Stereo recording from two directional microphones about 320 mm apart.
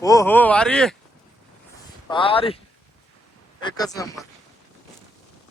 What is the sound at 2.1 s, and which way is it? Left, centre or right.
Speech, centre.